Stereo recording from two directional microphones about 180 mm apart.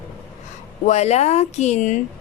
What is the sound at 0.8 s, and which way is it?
Speech, 40° left (ahead or behind).